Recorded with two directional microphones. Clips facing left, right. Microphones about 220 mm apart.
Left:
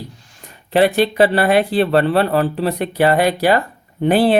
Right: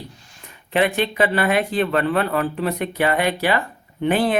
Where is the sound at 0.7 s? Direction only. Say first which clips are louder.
Left 6 dB; 35° left (ahead or behind).